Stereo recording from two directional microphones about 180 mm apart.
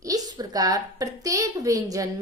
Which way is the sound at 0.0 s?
20° right (ahead or behind).